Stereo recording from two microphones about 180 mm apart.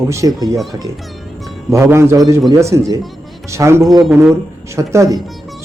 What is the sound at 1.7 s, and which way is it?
A man's voice, 15° right (ahead or behind).